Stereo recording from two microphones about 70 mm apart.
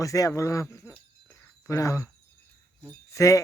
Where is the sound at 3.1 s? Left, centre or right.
Left.